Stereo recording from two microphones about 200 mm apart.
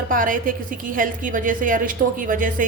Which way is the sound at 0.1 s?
45° right (ahead or behind).